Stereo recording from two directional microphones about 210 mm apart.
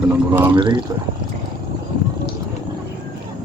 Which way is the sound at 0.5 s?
20° right (ahead or behind).